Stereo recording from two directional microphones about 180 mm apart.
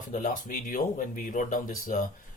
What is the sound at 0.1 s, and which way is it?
Speech, 45° left (ahead or behind).